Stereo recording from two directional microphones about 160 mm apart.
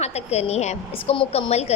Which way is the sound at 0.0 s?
40° left (ahead or behind).